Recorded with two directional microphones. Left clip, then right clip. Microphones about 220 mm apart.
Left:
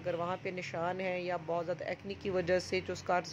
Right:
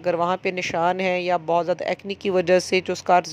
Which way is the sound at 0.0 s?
40° right (ahead or behind).